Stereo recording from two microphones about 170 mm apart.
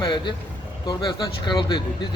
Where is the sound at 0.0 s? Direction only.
25° left (ahead or behind).